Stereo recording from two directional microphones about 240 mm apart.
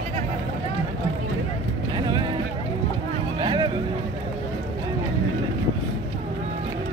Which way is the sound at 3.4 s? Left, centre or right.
Centre.